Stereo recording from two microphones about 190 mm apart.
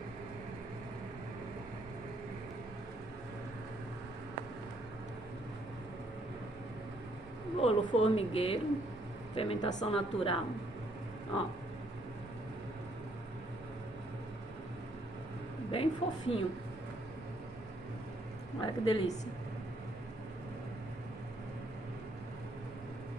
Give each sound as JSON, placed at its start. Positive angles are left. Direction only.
{"t": 7.6, "sound": "speech", "side_deg": 25}
{"t": 15.7, "sound": "a woman's voice", "side_deg": 30}
{"t": 18.6, "sound": "speech", "side_deg": 30}